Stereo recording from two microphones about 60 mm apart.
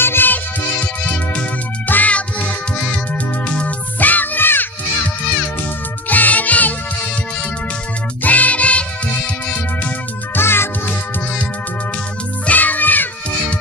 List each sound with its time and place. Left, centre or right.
0.0 s music: left
6.0 s music: left
8.2 s music: left
10.3 s music: left
12.4 s music: left